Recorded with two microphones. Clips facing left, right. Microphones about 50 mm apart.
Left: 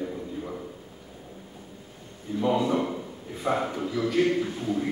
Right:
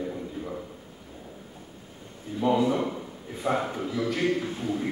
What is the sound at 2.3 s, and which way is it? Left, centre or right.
A man's voice, centre.